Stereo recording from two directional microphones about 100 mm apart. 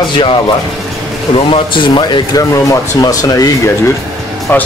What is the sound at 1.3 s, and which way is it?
Speech, 60° left (ahead or behind).